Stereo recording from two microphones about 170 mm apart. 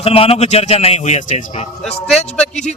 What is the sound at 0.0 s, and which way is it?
A man's voice, 35° left (ahead or behind).